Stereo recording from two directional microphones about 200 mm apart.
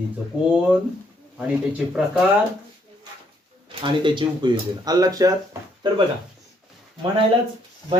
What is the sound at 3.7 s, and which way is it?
Speech, 25° right (ahead or behind).